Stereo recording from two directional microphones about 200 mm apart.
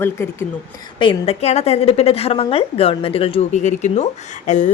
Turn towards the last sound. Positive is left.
turn(degrees=35)  # may be behind; listen again after turning